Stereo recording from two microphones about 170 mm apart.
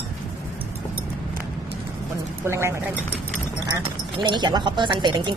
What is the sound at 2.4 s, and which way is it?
Speech, 15° right (ahead or behind).